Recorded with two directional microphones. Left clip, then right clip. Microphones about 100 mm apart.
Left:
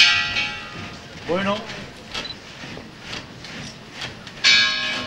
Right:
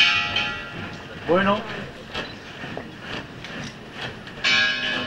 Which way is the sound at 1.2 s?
25° left (ahead or behind).